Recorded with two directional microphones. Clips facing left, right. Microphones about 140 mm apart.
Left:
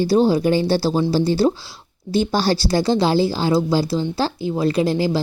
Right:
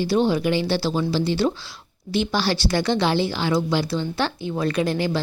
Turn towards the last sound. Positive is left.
turn(degrees=30)  # may be behind; listen again after turning